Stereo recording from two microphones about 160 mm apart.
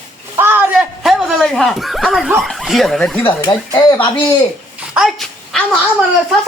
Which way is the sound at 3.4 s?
25° left (ahead or behind).